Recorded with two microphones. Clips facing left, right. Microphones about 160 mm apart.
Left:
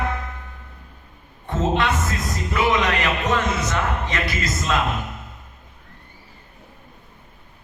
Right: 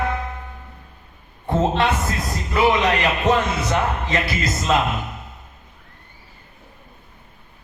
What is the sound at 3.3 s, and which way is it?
A man's voice, 30° right (ahead or behind).